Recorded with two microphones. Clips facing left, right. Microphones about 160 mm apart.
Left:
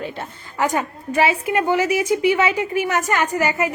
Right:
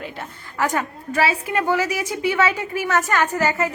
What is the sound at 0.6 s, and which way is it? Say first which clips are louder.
A woman's voice: left 2 dB; 15° left (ahead or behind).